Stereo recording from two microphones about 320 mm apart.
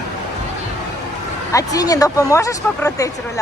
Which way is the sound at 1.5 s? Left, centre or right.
Centre.